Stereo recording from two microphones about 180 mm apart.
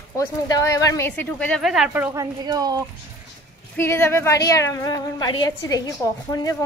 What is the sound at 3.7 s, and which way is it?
A woman's voice, 15° left (ahead or behind).